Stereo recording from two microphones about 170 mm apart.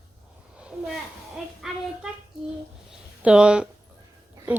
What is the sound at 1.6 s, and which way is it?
Child singing, centre (ahead or behind).